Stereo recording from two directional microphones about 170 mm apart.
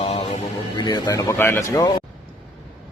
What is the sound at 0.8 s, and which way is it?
Speech, 25° left (ahead or behind).